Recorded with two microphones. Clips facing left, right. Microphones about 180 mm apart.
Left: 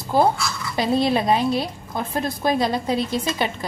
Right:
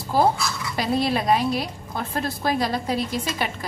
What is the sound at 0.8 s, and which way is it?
A woman's voice, 25° left (ahead or behind).